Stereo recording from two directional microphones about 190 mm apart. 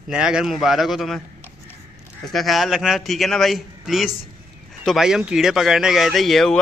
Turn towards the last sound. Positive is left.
turn(degrees=0)  # may be behind; listen again after turning